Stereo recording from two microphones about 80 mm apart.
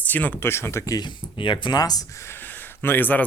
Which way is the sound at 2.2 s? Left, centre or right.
Left.